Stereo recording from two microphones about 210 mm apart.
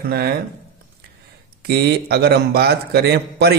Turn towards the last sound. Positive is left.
turn(degrees=-50)  # may be behind; listen again after turning